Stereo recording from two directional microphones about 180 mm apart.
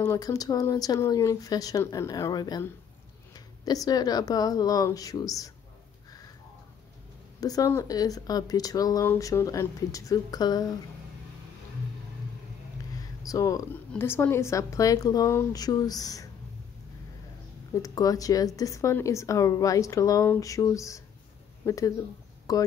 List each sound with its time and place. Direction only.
0.0 s speech: 15° left (ahead or behind)
7.3 s speech: 20° left (ahead or behind)
13.2 s speech: 20° left (ahead or behind)
17.8 s speech: 20° left (ahead or behind)